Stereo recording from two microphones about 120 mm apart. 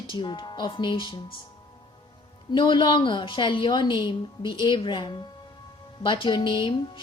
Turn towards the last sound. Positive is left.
turn(degrees=45)  # may be behind; listen again after turning